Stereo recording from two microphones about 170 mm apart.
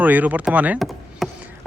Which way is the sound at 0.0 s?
10° right (ahead or behind).